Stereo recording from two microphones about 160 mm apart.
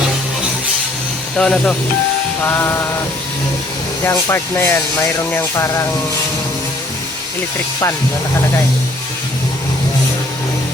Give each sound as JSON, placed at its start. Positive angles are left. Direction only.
{"t": 1.4, "sound": "speech", "side_deg": 5}
{"t": 4.0, "sound": "speech", "side_deg": 15}